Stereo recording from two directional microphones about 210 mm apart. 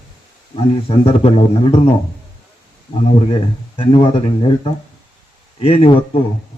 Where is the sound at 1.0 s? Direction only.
30° left (ahead or behind).